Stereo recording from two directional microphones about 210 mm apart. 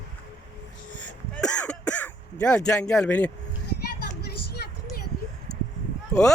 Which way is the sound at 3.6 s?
50° left (ahead or behind).